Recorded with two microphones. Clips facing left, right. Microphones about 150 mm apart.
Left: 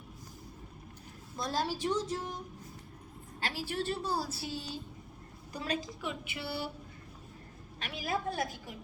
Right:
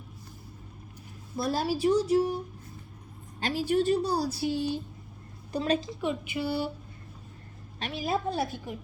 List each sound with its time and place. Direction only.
1.4 s a woman's voice: 10° right (ahead or behind)
3.4 s a woman's voice: 20° right (ahead or behind)
4.5 s speech: 60° right (ahead or behind)
5.5 s a woman's voice: 25° right (ahead or behind)
7.8 s a woman's voice: 25° right (ahead or behind)